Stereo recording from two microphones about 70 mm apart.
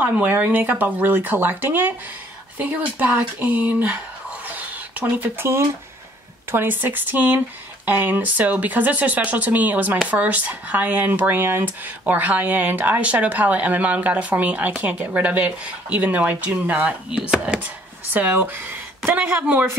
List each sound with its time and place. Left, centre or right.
0.0 s speech: right
5.2 s speech: right